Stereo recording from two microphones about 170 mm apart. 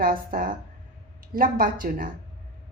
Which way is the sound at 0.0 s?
55° right (ahead or behind).